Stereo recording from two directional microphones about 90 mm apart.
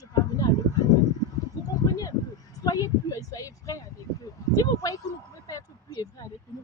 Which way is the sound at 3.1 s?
40° left (ahead or behind).